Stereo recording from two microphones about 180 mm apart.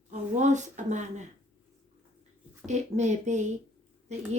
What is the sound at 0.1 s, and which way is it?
A woman's voice, 40° right (ahead or behind).